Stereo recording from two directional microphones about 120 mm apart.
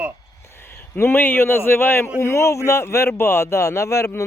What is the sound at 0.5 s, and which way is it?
A man's voice, 20° left (ahead or behind).